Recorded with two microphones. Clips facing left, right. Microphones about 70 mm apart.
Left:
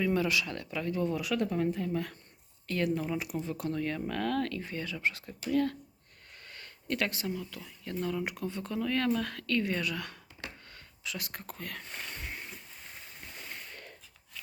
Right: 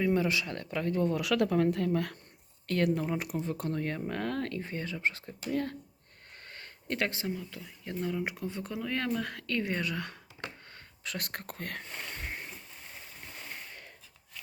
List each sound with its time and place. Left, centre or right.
0.0 s speech: right
1.2 s speech: right
11.0 s speech: right